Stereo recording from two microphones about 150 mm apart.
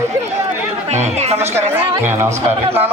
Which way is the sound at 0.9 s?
50° right (ahead or behind).